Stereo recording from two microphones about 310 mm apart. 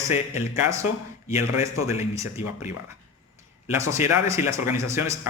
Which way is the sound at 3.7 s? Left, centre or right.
Centre.